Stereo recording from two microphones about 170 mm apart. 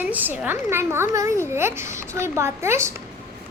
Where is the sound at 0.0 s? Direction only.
10° right (ahead or behind).